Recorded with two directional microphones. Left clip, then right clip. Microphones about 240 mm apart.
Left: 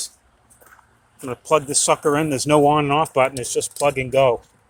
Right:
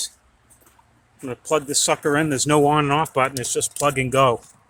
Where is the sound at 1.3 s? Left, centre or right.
Centre.